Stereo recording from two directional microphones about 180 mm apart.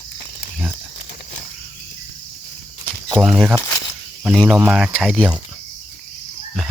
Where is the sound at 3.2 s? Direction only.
Centre (ahead or behind).